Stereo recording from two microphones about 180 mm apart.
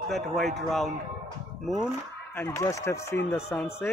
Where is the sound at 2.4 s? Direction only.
15° left (ahead or behind).